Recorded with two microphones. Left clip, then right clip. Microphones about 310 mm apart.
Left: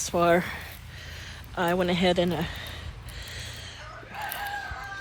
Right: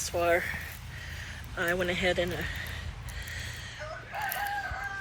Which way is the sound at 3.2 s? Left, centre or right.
Centre.